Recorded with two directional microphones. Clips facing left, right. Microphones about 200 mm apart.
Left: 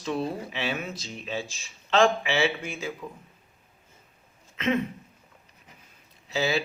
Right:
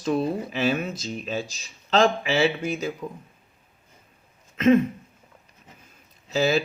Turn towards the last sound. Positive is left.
turn(degrees=-45)  # may be behind; listen again after turning